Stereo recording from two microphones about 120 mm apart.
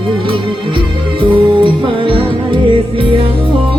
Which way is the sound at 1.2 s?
45° right (ahead or behind).